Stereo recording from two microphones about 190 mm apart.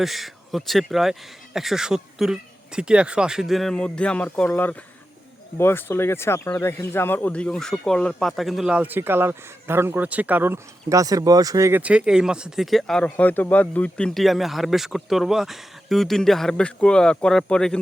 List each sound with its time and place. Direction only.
0.0 s speech: centre (ahead or behind)